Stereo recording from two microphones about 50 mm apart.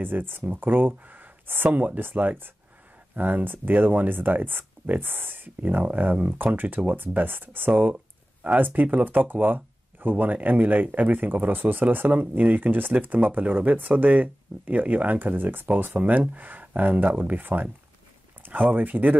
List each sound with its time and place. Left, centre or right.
0.0 s speech: right
18.8 s speech: right